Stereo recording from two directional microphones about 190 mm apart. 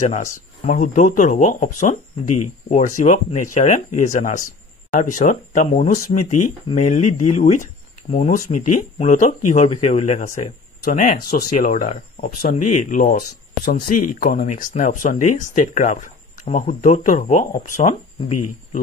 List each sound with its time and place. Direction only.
0.7 s speech: 40° left (ahead or behind)